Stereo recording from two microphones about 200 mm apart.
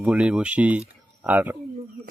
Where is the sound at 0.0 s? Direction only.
5° right (ahead or behind).